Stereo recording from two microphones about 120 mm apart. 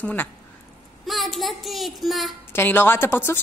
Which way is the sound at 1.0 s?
Centre (ahead or behind).